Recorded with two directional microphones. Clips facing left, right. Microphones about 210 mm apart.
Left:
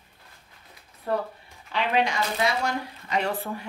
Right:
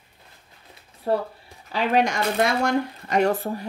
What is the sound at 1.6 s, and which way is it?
Speech, 40° right (ahead or behind).